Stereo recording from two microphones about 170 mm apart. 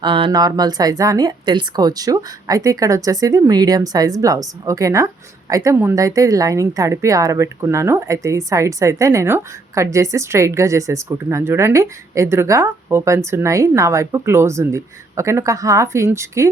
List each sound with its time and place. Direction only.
0.0 s a woman's voice: 30° right (ahead or behind)